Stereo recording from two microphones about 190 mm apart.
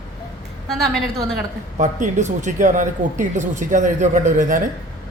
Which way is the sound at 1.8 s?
40° right (ahead or behind).